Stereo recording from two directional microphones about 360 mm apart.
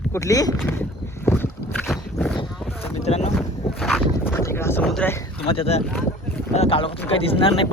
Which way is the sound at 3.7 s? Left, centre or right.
Centre.